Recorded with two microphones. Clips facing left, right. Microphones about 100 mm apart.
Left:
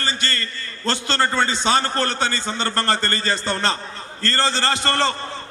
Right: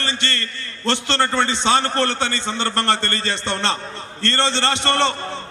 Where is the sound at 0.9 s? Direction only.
25° right (ahead or behind).